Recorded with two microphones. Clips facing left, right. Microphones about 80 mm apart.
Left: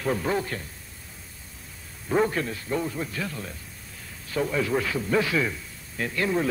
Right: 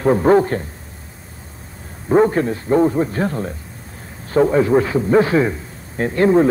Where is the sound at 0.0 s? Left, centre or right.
Right.